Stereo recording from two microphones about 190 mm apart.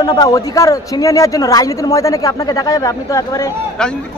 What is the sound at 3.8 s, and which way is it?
Speech, 5° left (ahead or behind).